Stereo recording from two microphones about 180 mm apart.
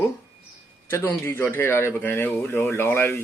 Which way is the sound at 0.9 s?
15° left (ahead or behind).